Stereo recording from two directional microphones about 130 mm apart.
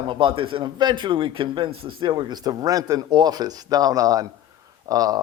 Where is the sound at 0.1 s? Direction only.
40° right (ahead or behind).